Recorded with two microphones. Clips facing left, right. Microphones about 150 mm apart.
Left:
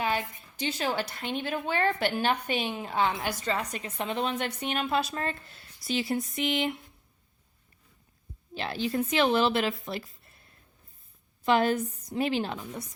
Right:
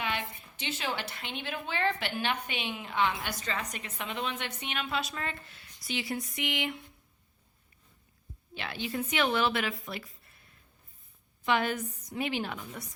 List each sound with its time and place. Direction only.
0.0 s a woman's voice: 40° left (ahead or behind)
8.5 s a woman's voice: 35° left (ahead or behind)
11.4 s a woman's voice: 35° left (ahead or behind)